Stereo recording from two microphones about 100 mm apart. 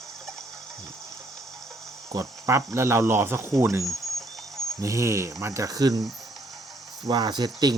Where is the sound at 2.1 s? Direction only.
30° right (ahead or behind).